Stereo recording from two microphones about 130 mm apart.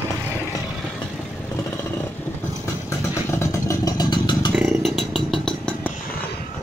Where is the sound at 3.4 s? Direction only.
25° left (ahead or behind).